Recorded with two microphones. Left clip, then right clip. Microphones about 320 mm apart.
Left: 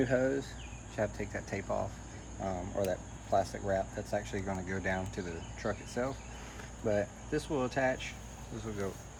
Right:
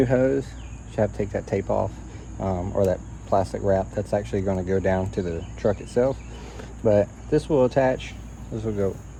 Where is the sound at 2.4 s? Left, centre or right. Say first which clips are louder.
Right 11 dB; right.